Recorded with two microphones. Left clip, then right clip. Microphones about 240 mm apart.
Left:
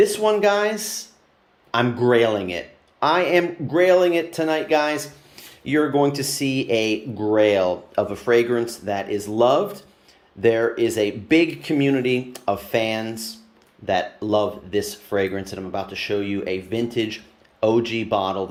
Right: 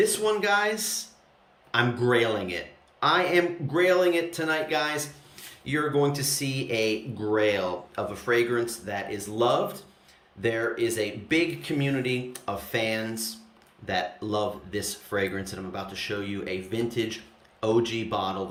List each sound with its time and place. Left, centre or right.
0.0 s speech: centre